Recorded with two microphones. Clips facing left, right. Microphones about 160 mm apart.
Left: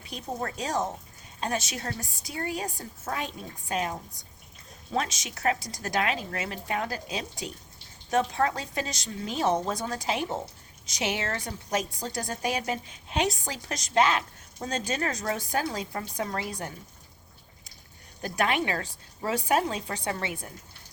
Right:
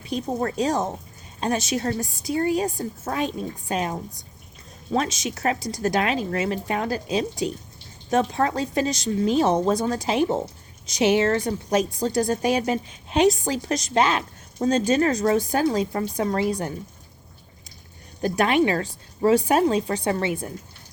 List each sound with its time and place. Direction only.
0.1 s a woman's voice: 30° right (ahead or behind)
4.9 s a woman's voice: 30° right (ahead or behind)
18.2 s a woman's voice: 30° right (ahead or behind)